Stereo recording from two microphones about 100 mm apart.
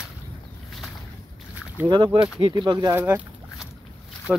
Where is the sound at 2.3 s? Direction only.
55° right (ahead or behind).